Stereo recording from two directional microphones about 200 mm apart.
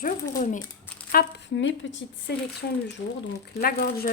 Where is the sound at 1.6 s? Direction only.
65° left (ahead or behind).